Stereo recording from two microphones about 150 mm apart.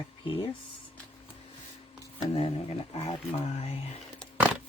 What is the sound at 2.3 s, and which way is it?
Speech, 40° left (ahead or behind).